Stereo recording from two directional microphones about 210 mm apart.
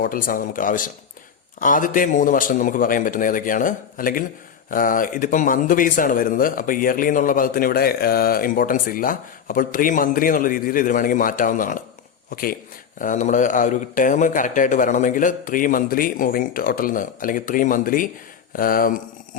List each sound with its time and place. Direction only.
0.0 s speech: 40° left (ahead or behind)
13.0 s speech: 35° left (ahead or behind)